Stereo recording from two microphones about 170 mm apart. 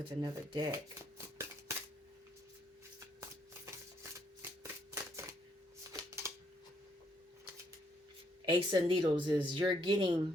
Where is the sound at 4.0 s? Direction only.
15° right (ahead or behind).